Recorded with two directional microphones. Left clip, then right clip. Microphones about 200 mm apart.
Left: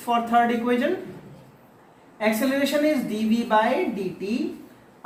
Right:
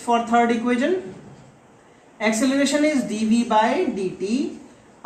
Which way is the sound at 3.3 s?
10° left (ahead or behind).